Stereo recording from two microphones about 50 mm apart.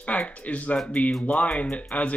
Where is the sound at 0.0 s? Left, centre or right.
Left.